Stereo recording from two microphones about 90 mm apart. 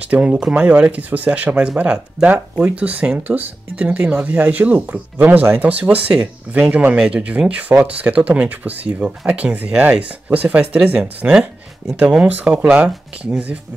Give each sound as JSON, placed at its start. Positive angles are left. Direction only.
{"t": 0.1, "sound": "speech", "side_deg": -10}